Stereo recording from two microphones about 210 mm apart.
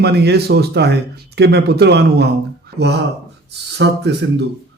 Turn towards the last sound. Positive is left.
turn(degrees=-55)  # may be behind; listen again after turning